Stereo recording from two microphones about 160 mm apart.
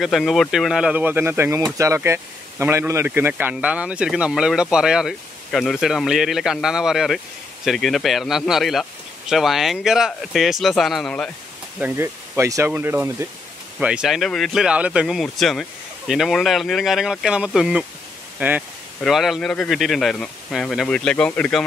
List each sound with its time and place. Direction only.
0.0 s speech: centre (ahead or behind)
11.8 s speech: 15° right (ahead or behind); by 21.6 s 5° left (ahead or behind)